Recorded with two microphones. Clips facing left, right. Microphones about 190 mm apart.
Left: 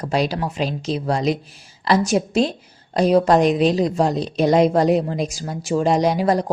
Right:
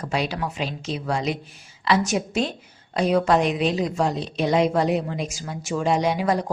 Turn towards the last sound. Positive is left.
turn(degrees=35)  # may be behind; listen again after turning